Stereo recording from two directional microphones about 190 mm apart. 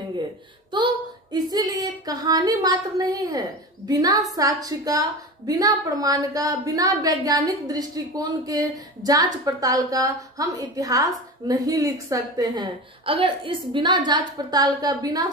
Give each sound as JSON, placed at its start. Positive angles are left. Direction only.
{"t": 1.3, "sound": "a woman's voice", "side_deg": -20}